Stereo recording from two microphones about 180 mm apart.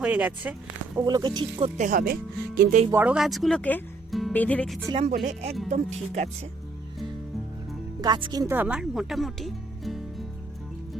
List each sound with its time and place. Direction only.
0.0 s speech: 10° right (ahead or behind)
0.9 s speech: 20° right (ahead or behind)
1.8 s speech: 50° right (ahead or behind)
2.9 s speech: 10° right (ahead or behind)
5.2 s speech: 35° right (ahead or behind)
8.0 s speech: 25° right (ahead or behind); by 10.2 s centre (ahead or behind)